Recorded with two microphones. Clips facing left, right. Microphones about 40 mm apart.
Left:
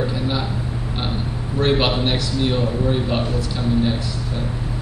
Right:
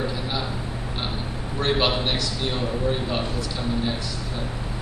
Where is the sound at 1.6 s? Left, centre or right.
Centre.